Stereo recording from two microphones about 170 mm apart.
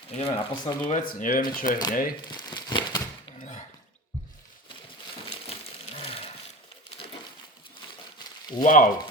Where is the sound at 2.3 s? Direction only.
25° left (ahead or behind).